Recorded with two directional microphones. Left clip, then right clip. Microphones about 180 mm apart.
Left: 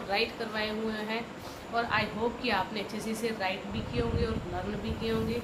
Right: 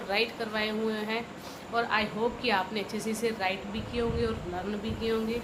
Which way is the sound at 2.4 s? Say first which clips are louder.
Right 2 dB; 45° right (ahead or behind).